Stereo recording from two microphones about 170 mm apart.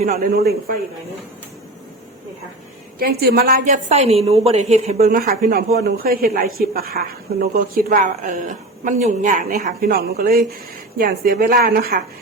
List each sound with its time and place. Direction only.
0.0 s a woman's voice: 55° right (ahead or behind)
3.0 s a woman's voice: 65° right (ahead or behind)
3.7 s a woman's voice: 40° right (ahead or behind)
5.2 s a woman's voice: 60° right (ahead or behind); by 9.7 s 45° right (ahead or behind)
9.8 s a woman's voice: 60° right (ahead or behind)